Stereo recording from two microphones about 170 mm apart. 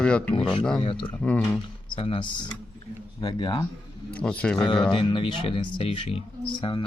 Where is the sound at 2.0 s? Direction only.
35° left (ahead or behind).